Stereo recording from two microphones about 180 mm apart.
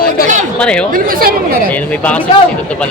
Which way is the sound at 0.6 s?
5° left (ahead or behind).